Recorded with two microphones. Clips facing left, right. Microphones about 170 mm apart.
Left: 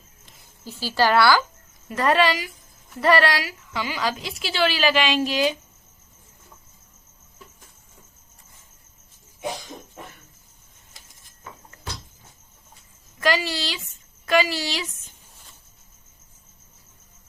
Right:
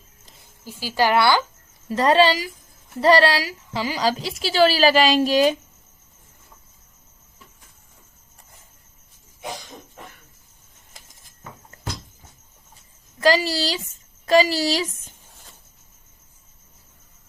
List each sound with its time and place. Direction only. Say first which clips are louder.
0.6 s a woman's voice: even; 15° right (ahead or behind); by 5.5 s 45° right (ahead or behind)
13.1 s a woman's voice: right 4 dB; 35° right (ahead or behind)